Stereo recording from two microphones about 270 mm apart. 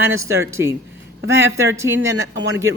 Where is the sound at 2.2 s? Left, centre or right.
Right.